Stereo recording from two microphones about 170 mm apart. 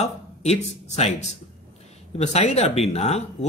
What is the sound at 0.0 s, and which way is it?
Speech, 40° left (ahead or behind).